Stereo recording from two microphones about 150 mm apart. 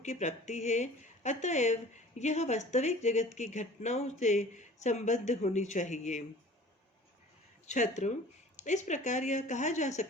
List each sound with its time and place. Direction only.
0.0 s speech: 50° left (ahead or behind)
7.7 s speech: 50° left (ahead or behind)